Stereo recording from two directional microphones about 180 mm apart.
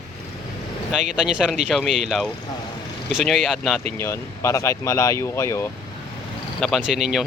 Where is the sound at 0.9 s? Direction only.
5° right (ahead or behind).